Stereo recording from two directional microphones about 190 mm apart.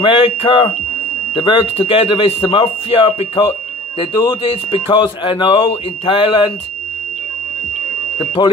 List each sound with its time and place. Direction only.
0.0 s speech: 30° left (ahead or behind)
8.4 s speech: 25° left (ahead or behind)